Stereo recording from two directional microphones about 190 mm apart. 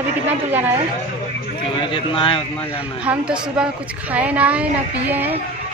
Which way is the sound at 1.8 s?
25° left (ahead or behind).